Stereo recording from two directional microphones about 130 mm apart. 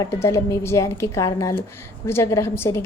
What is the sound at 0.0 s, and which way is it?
A woman's voice, 20° left (ahead or behind).